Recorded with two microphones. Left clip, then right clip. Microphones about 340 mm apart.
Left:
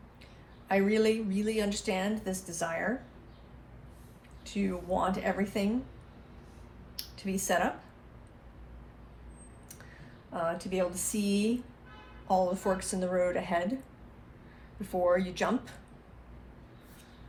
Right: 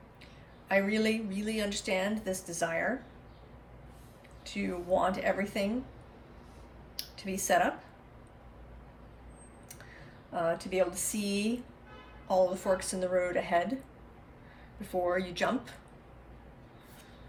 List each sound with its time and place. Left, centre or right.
0.7 s a woman's voice: centre
4.5 s a woman's voice: centre
7.2 s a woman's voice: centre
10.3 s a woman's voice: centre
14.8 s a woman's voice: centre